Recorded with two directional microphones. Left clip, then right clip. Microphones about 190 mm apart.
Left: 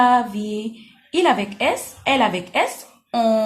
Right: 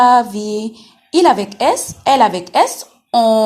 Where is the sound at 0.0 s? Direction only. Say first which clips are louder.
Right 6 dB; 45° right (ahead or behind).